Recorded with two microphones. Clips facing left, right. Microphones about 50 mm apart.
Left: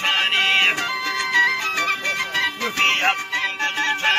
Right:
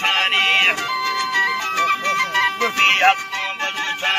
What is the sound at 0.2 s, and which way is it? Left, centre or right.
Music, right.